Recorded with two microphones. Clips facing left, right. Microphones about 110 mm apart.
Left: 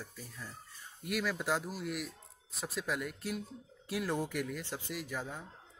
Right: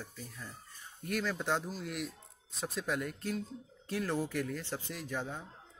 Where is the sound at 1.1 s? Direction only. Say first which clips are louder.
Even; 10° left (ahead or behind).